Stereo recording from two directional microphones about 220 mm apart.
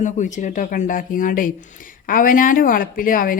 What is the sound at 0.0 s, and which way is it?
Speech, 35° left (ahead or behind).